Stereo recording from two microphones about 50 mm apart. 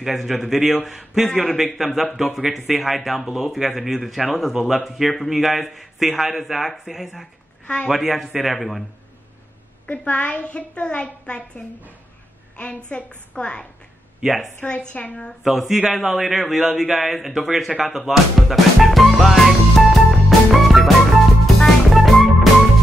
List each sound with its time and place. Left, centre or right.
0.0 s a man's voice: centre
7.6 s speech: left
7.9 s speech: centre
9.8 s a woman's voice: left
13.3 s a woman's voice: left
14.2 s speech: centre
14.8 s a woman's voice: left
15.4 s speech: centre
19.1 s music: centre